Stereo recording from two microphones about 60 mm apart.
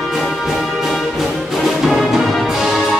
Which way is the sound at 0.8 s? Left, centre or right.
Centre.